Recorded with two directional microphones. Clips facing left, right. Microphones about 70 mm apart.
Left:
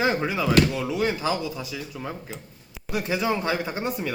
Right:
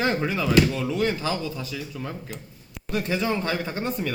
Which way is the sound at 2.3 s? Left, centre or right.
Centre.